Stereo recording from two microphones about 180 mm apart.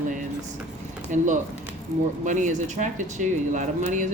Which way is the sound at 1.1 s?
45° right (ahead or behind).